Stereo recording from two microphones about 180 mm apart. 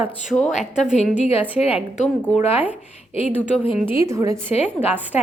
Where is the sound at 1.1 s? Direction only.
35° left (ahead or behind).